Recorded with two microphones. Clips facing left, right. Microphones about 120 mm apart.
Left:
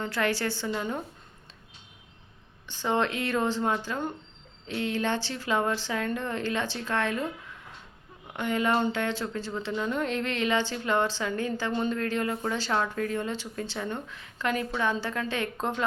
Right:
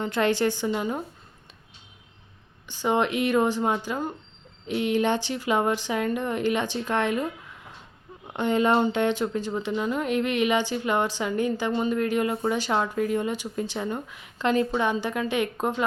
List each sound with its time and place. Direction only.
0.0 s speech: 20° right (ahead or behind)
2.6 s speech: 15° right (ahead or behind)
8.3 s speech: 25° right (ahead or behind)